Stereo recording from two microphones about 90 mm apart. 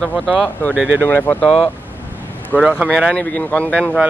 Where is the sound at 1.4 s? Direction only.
75° left (ahead or behind).